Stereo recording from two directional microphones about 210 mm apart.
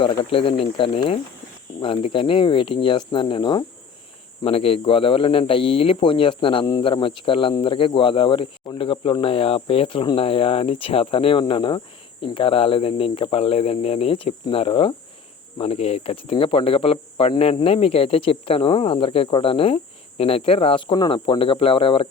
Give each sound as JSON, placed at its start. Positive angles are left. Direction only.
{"t": 0.0, "sound": "speech", "side_deg": 25}